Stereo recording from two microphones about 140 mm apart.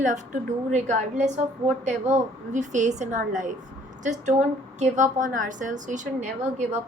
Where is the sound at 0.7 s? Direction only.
60° right (ahead or behind).